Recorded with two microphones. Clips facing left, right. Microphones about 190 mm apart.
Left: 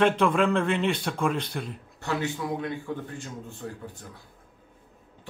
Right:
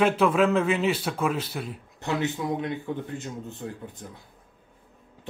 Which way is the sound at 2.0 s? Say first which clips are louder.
Right 2 dB; 20° right (ahead or behind).